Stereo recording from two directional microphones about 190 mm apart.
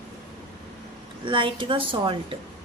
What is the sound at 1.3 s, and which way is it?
A woman's voice, 25° right (ahead or behind).